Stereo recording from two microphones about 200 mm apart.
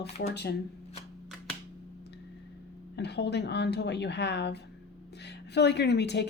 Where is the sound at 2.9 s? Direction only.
55° left (ahead or behind).